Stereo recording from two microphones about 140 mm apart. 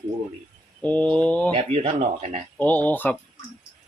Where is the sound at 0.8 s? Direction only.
10° left (ahead or behind).